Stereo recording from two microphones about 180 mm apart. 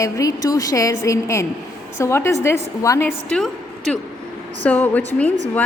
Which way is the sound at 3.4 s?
Centre (ahead or behind).